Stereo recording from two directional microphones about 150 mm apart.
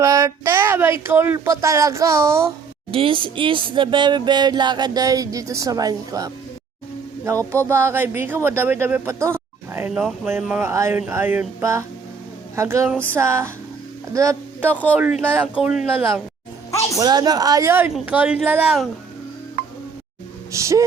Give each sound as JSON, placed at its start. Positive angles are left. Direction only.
{"t": 0.0, "sound": "speech", "side_deg": -20}
{"t": 2.9, "sound": "speech", "side_deg": -35}
{"t": 7.7, "sound": "speech", "side_deg": -15}
{"t": 10.7, "sound": "speech", "side_deg": -15}
{"t": 17.0, "sound": "speech", "side_deg": -25}
{"t": 20.5, "sound": "speech", "side_deg": -20}